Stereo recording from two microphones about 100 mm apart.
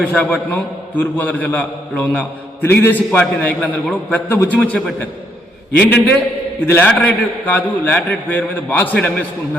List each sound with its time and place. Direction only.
0.0 s a man's voice: 10° left (ahead or behind)
5.8 s a man's voice: 20° left (ahead or behind)